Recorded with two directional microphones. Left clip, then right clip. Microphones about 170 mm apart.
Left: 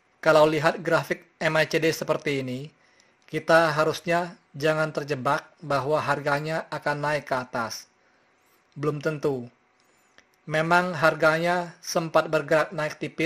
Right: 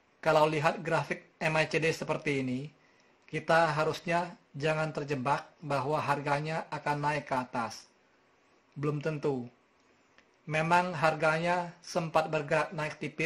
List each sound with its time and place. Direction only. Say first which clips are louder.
0.2 s speech: left 7 dB; 30° left (ahead or behind)
8.7 s speech: left 6 dB; 30° left (ahead or behind)